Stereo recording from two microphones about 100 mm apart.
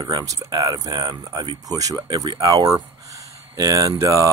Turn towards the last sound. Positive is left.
turn(degrees=-30)  # may be behind; listen again after turning